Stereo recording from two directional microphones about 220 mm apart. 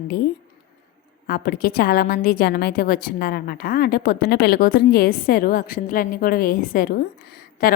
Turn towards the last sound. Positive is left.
turn(degrees=40)  # may be behind; listen again after turning